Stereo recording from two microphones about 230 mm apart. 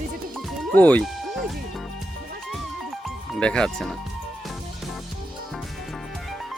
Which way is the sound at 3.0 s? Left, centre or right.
Centre.